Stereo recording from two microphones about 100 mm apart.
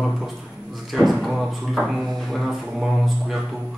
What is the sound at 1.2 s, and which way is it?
Speech, centre (ahead or behind).